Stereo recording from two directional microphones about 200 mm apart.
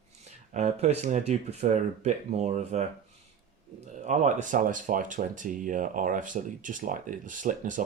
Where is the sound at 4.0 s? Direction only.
35° right (ahead or behind).